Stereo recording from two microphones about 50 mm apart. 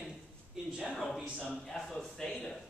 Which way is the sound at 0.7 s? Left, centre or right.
Centre.